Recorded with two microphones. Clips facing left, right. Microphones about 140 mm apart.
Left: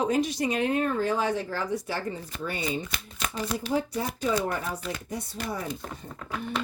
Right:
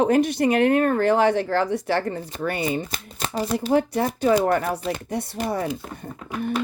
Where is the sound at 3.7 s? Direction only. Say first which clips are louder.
Right 9 dB; 65° right (ahead or behind).